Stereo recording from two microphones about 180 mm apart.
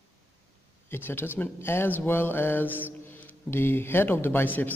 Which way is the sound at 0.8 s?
10° left (ahead or behind).